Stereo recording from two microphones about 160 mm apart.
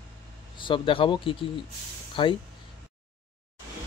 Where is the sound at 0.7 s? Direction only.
30° left (ahead or behind).